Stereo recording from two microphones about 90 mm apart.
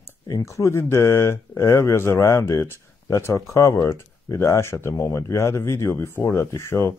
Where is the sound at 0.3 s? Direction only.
35° left (ahead or behind).